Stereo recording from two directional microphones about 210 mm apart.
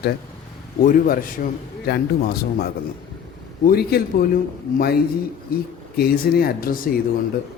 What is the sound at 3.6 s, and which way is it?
Speech, 45° left (ahead or behind).